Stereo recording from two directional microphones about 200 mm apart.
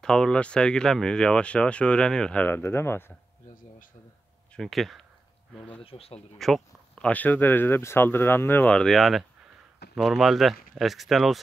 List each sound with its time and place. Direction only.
0.0 s speech: 5° left (ahead or behind)
4.6 s speech: centre (ahead or behind)
5.8 s speech: 30° left (ahead or behind)
6.3 s speech: centre (ahead or behind)